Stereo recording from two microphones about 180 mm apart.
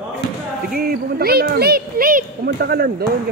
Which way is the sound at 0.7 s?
55° right (ahead or behind).